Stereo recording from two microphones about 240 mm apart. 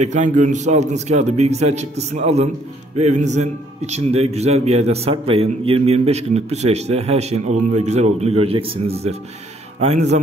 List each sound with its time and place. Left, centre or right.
0.0 s a man's voice: right